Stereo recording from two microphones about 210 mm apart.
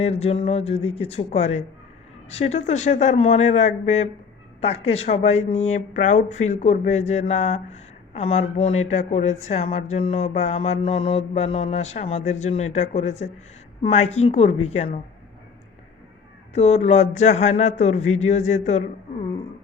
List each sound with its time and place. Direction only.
0.0 s speech: 30° left (ahead or behind)
16.6 s speech: 30° left (ahead or behind)